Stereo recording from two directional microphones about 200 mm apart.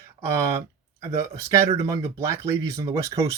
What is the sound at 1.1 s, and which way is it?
Speech, 15° right (ahead or behind).